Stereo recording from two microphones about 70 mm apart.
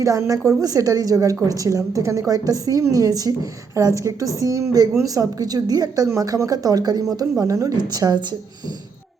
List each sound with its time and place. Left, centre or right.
0.0 s a woman's voice: right
7.8 s a woman's voice: right